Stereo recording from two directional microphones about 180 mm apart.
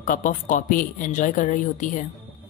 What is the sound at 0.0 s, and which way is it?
A woman's voice, 50° left (ahead or behind).